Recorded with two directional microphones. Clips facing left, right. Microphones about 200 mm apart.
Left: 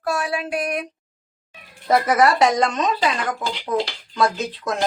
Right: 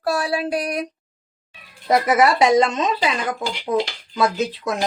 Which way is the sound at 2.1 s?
20° right (ahead or behind).